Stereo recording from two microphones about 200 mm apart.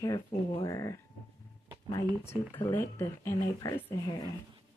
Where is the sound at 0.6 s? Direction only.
15° left (ahead or behind).